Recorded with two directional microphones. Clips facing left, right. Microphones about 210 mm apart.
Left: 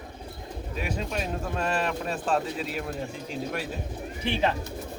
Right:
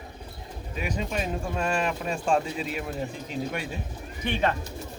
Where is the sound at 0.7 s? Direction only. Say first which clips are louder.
Right 1 dB; centre (ahead or behind).